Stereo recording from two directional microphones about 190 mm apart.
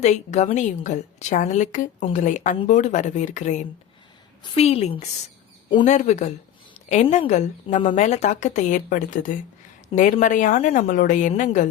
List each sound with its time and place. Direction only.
0.0 s a woman's voice: 40° left (ahead or behind)